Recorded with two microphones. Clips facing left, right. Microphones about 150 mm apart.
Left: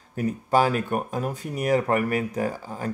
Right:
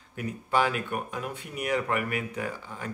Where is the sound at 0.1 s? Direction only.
40° left (ahead or behind).